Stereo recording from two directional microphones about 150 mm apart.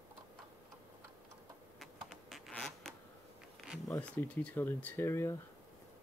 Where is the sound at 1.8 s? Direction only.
Centre (ahead or behind).